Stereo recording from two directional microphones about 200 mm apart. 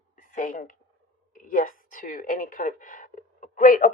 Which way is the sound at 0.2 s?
45° left (ahead or behind).